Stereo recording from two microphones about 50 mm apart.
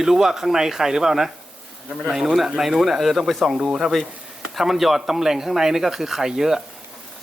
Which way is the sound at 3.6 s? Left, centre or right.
Centre.